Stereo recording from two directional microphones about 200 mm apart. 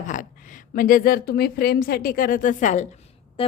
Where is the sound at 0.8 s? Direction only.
45° left (ahead or behind).